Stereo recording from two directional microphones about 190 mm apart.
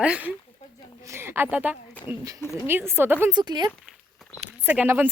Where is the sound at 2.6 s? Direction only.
10° right (ahead or behind).